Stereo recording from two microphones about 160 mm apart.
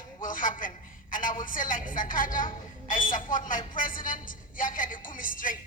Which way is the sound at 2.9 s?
55° left (ahead or behind).